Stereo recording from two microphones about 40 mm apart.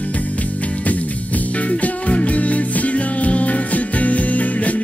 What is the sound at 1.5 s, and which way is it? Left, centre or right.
Music, left.